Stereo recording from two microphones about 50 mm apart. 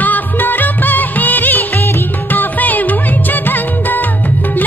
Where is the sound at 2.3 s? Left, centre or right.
Left.